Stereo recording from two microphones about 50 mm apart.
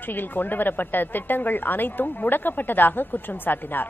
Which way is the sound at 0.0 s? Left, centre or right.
Left.